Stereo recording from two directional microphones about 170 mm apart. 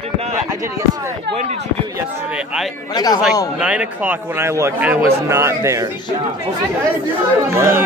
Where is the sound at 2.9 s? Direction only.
25° left (ahead or behind).